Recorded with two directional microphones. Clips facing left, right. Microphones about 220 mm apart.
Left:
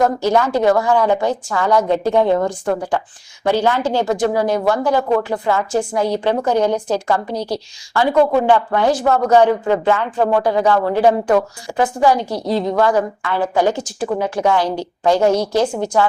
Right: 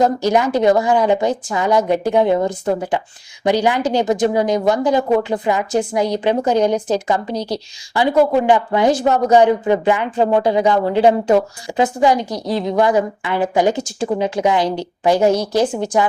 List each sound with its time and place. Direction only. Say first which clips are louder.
0.0 s a woman's voice: even; 15° right (ahead or behind)